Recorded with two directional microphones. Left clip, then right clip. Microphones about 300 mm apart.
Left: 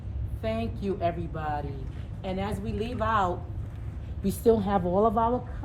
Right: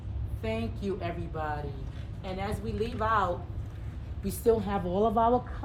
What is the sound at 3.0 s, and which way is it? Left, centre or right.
A woman's voice, centre.